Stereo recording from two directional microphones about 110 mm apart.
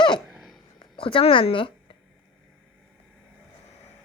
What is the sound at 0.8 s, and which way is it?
Speech, 55° left (ahead or behind).